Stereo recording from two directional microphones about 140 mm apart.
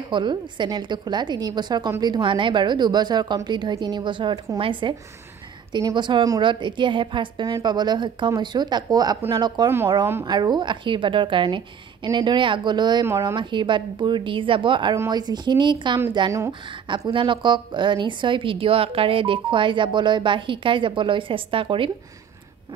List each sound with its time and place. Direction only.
0.1 s a woman's voice: 35° right (ahead or behind)
16.8 s a woman's voice: 35° right (ahead or behind)